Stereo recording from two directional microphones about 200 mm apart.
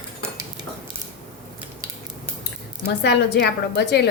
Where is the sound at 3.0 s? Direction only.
55° left (ahead or behind).